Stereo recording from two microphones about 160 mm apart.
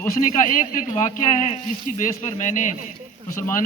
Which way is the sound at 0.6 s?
55° left (ahead or behind).